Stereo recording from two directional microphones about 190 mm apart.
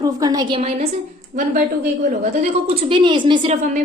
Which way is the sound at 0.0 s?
20° right (ahead or behind).